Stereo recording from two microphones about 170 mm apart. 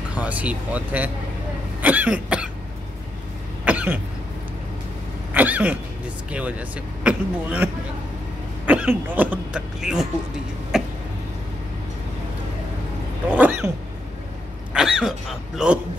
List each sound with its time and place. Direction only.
0.1 s speech: 10° right (ahead or behind)
1.8 s cough: 10° right (ahead or behind)
3.6 s cough: 10° right (ahead or behind)
5.3 s cough: 10° right (ahead or behind)
6.3 s speech: 10° right (ahead or behind)
13.3 s a sound: 10° right (ahead or behind)
14.7 s speech: 5° right (ahead or behind)